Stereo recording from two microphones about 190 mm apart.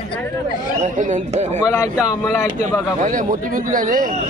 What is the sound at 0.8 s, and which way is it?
Speech, 40° right (ahead or behind).